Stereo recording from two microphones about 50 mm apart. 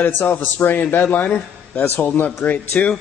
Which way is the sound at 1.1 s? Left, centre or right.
Left.